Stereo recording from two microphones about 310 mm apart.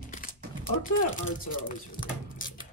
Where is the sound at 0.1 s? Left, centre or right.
Left.